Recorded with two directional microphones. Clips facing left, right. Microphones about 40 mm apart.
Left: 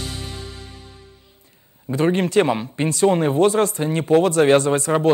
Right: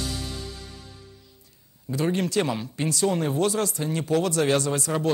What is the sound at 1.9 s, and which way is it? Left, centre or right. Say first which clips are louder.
Speech: left 6 dB; left.